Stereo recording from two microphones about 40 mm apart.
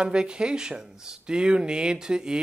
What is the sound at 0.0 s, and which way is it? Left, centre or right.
A man's voice, right.